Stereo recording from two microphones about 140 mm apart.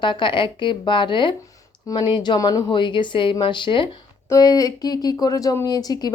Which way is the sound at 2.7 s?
35° left (ahead or behind).